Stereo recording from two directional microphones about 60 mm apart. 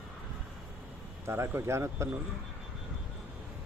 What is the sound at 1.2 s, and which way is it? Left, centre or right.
Speech, right.